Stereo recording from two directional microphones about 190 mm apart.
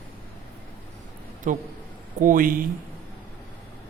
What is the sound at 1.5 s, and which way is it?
A man's voice, 45° right (ahead or behind).